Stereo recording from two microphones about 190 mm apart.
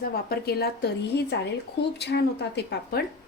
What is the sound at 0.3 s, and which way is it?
A woman's voice, 55° left (ahead or behind).